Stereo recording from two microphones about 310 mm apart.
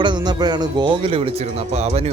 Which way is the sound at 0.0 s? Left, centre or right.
Centre.